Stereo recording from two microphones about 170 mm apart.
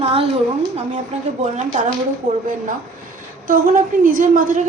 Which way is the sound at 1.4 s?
45° right (ahead or behind).